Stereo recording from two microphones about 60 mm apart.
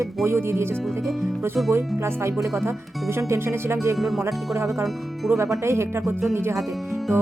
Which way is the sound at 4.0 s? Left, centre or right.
Centre.